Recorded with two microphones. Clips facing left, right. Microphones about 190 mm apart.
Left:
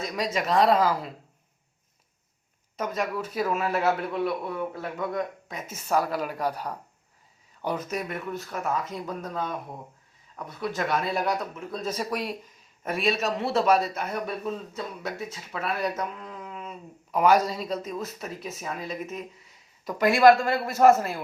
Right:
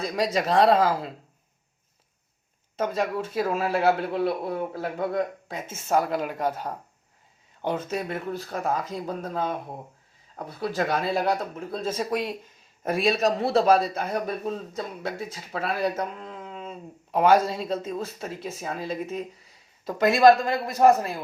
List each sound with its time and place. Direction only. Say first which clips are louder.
0.0 s speech: right 3 dB; 35° right (ahead or behind)
2.7 s a man's voice: right 3 dB; 30° right (ahead or behind)
12.9 s a man's voice: right 4 dB; 35° right (ahead or behind); by 21.2 s 15° right (ahead or behind)